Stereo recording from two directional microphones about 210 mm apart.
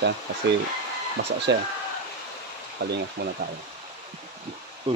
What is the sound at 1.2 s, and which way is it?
Speech, 65° right (ahead or behind).